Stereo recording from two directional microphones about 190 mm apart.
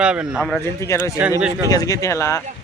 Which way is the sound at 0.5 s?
15° left (ahead or behind).